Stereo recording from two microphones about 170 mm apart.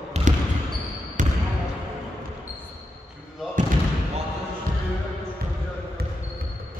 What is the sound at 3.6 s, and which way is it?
Basketball bounce, 50° right (ahead or behind).